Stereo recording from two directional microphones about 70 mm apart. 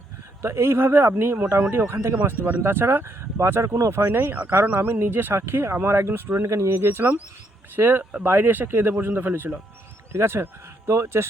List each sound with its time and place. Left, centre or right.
0.4 s speech: right
6.4 s speech: right